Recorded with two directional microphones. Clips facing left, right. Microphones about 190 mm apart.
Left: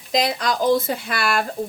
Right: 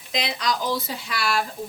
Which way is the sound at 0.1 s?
45° left (ahead or behind).